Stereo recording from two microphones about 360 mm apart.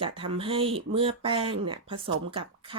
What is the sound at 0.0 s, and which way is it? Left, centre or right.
Speech, centre.